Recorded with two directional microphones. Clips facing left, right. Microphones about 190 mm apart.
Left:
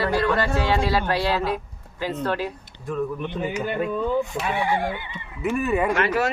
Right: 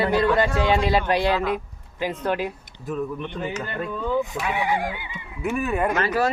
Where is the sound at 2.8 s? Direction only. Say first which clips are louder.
Left 1 dB; centre (ahead or behind).